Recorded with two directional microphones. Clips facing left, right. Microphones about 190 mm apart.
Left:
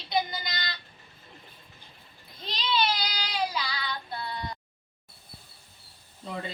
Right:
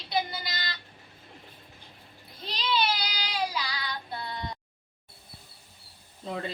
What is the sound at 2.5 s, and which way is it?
Child singing, 10° right (ahead or behind).